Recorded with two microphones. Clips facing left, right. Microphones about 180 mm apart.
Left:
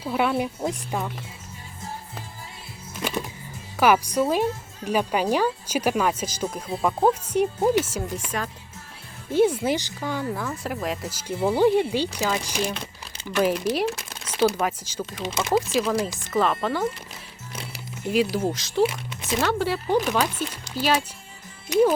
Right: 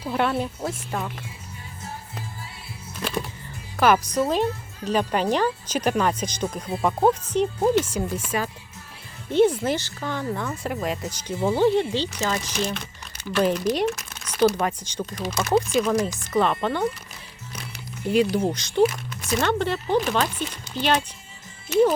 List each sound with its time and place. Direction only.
0.0 s speech: 5° left (ahead or behind)
3.8 s speech: 10° left (ahead or behind)
9.3 s speech: 10° left (ahead or behind)
13.9 s speech: 30° left (ahead or behind)
14.4 s speech: 5° left (ahead or behind)
15.2 s speech: 25° left (ahead or behind)
16.1 s speech: centre (ahead or behind)
17.5 s music: 30° left (ahead or behind)
18.1 s speech: centre (ahead or behind)
18.9 s a sound: 25° left (ahead or behind)
19.3 s speech: 5° left (ahead or behind)